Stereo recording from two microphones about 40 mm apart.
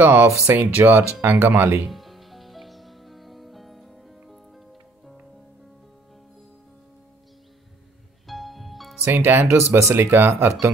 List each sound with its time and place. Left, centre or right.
0.0 s speech: right
0.5 s speech: right
1.9 s music: centre
8.3 s music: centre
9.1 s speech: right